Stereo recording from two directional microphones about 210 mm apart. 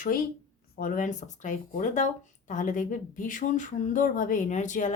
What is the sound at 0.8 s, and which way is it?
A woman's voice, 40° left (ahead or behind).